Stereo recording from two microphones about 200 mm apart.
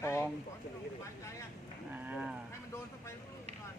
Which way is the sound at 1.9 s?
5° right (ahead or behind).